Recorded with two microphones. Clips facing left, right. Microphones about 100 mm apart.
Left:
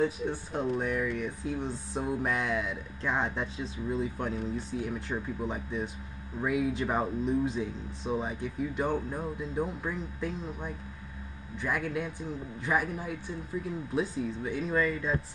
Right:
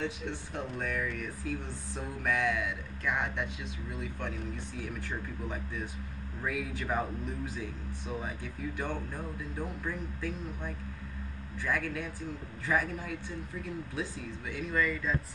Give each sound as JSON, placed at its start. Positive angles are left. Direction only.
{"t": 0.5, "sound": "speech", "side_deg": 25}